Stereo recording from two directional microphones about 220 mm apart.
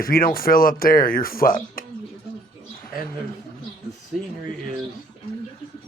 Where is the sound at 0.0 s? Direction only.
40° left (ahead or behind).